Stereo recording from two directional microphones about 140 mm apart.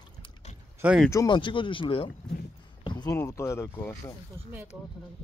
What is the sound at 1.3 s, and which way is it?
Speech, 35° left (ahead or behind).